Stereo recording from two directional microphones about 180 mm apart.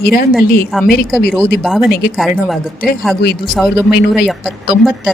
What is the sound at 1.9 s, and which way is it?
Speech, 55° left (ahead or behind).